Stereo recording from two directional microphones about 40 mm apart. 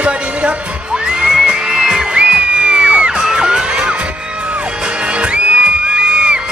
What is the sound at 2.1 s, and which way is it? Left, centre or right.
Music, right.